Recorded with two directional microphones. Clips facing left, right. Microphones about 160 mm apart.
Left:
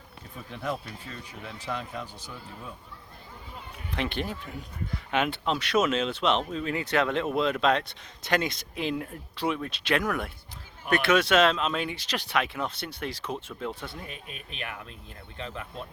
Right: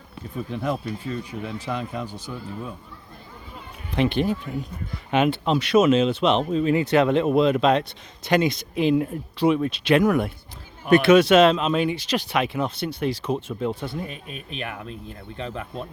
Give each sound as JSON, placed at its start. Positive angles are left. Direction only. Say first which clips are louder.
{"t": 0.5, "sound": "speech", "louder": "right 6 dB", "side_deg": -15}
{"t": 3.9, "sound": "speech", "louder": "right 9 dB", "side_deg": -10}
{"t": 5.5, "sound": "speech", "louder": "right 8 dB", "side_deg": -15}
{"t": 14.1, "sound": "speech", "louder": "right 6 dB", "side_deg": -40}